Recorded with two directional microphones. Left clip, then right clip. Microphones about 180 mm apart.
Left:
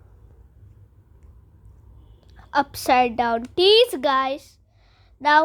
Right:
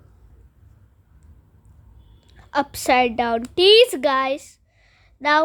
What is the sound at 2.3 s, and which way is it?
A woman's voice, 15° right (ahead or behind).